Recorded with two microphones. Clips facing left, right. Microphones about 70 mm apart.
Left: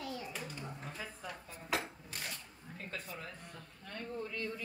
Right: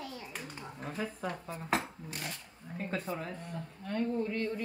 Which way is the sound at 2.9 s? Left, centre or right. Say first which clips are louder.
Right 9 dB; right.